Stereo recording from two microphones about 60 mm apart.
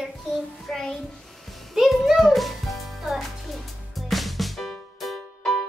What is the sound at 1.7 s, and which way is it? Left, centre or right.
Music, centre.